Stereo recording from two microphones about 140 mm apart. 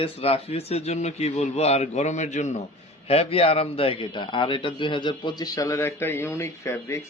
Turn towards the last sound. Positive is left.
turn(degrees=20)  # may be behind; listen again after turning